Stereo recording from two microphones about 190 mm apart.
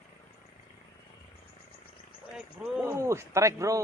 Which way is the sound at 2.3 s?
5° right (ahead or behind).